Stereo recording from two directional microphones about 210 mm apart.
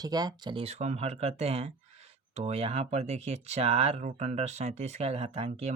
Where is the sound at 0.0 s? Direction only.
20° right (ahead or behind).